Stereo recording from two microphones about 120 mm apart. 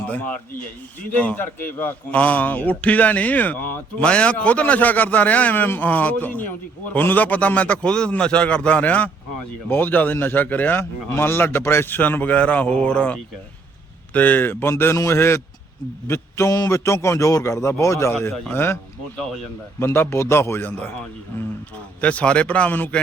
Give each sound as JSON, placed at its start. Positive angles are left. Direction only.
{"t": 1.1, "sound": "a man's voice", "side_deg": 10}
{"t": 19.1, "sound": "speech", "side_deg": 5}
{"t": 19.8, "sound": "a man's voice", "side_deg": 20}
{"t": 22.0, "sound": "a man's voice", "side_deg": 10}